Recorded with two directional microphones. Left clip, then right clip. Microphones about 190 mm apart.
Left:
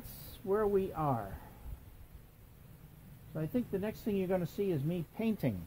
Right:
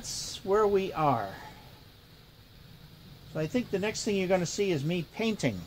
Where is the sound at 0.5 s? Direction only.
25° left (ahead or behind).